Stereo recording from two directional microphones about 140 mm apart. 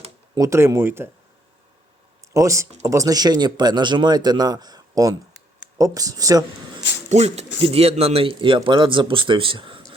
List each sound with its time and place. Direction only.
0.3 s speech: 20° right (ahead or behind)
2.3 s speech: 20° right (ahead or behind)
7.1 s speech: 50° right (ahead or behind)